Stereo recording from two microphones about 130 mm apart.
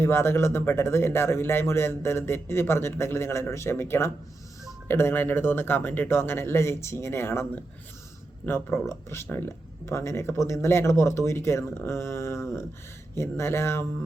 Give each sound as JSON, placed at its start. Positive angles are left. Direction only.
{"t": 0.0, "sound": "speech", "side_deg": 20}